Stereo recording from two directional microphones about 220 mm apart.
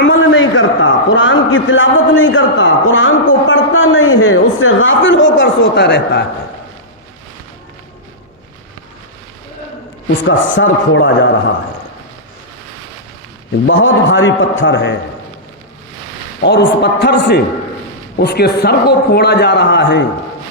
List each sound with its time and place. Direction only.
0.0 s a man's voice: 60° left (ahead or behind)
10.2 s a man's voice: 60° left (ahead or behind)
13.7 s a man's voice: 60° left (ahead or behind)
16.4 s a man's voice: 50° left (ahead or behind)